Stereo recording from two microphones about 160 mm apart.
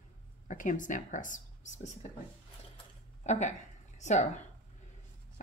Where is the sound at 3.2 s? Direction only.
45° left (ahead or behind).